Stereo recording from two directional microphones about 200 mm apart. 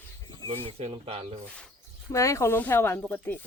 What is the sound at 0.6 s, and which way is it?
Speech, 30° right (ahead or behind).